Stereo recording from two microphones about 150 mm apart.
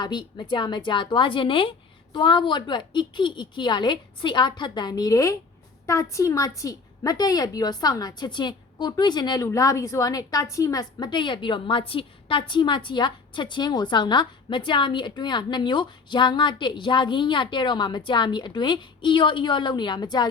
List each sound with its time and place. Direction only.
0.0 s a woman's voice: 30° left (ahead or behind)